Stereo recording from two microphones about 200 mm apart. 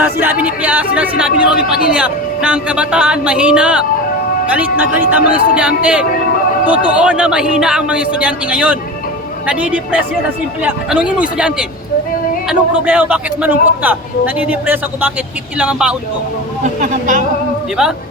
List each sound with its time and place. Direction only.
0.0 s a man's voice: 10° right (ahead or behind)
16.8 s speech: 40° right (ahead or behind)